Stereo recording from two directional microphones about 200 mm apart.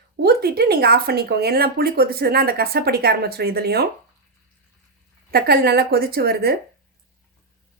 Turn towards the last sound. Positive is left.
turn(degrees=-50)  # may be behind; listen again after turning